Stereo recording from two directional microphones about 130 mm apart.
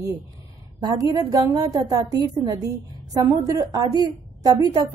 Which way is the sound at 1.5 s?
30° right (ahead or behind).